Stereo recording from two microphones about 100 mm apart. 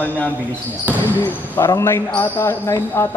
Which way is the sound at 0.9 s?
20° left (ahead or behind).